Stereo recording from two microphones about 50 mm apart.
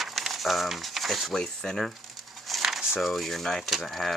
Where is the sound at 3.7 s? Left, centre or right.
Centre.